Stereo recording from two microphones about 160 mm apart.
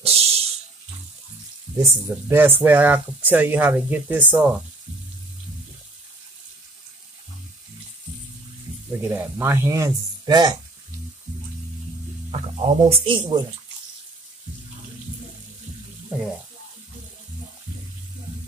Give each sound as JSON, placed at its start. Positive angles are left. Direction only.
{"t": 0.0, "sound": "a sound", "side_deg": -40}
{"t": 1.8, "sound": "speech", "side_deg": -15}
{"t": 9.0, "sound": "speech", "side_deg": -15}
{"t": 12.3, "sound": "speech", "side_deg": -40}